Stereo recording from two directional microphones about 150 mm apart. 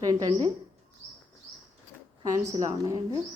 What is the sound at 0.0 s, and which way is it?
Speech, 25° right (ahead or behind).